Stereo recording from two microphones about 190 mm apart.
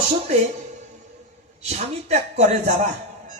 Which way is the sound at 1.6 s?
35° right (ahead or behind).